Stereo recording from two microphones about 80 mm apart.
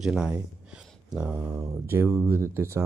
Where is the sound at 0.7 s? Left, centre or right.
Centre.